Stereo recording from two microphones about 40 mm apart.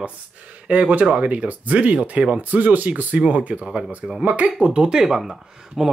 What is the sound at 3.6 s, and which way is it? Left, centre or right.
Speech, centre.